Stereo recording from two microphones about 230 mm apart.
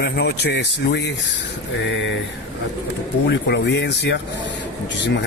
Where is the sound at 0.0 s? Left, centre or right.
Left.